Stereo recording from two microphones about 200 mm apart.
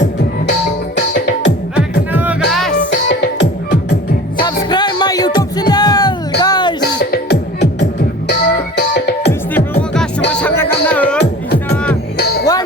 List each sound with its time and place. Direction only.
0.9 s music: 60° left (ahead or behind)
1.7 s music: 10° right (ahead or behind)
2.9 s music: 60° left (ahead or behind)
4.4 s music: 20° left (ahead or behind)
7.0 s music: 55° left (ahead or behind)
10.4 s music: 10° left (ahead or behind)
12.1 s music: 50° left (ahead or behind)